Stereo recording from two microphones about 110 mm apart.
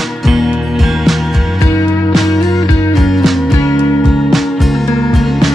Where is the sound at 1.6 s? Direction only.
30° left (ahead or behind).